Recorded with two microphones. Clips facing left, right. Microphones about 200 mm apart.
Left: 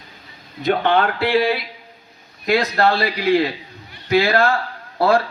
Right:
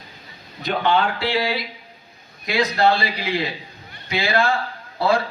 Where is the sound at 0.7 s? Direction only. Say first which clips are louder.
Left 3 dB; 60° left (ahead or behind).